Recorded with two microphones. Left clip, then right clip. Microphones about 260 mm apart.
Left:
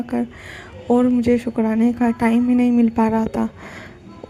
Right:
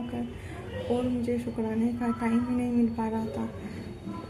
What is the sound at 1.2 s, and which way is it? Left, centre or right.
A woman's voice, left.